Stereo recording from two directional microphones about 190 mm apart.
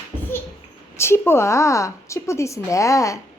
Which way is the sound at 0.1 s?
10° left (ahead or behind).